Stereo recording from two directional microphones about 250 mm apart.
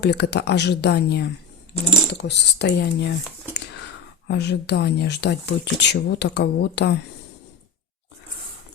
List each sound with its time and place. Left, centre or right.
0.0 s speech: left
4.3 s speech: left